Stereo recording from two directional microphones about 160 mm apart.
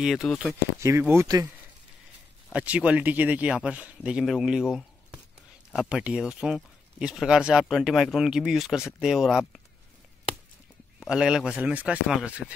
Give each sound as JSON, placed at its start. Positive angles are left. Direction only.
{"t": 0.0, "sound": "speech", "side_deg": 0}
{"t": 0.7, "sound": "speech", "side_deg": -15}
{"t": 2.5, "sound": "speech", "side_deg": -10}
{"t": 11.0, "sound": "speech", "side_deg": -5}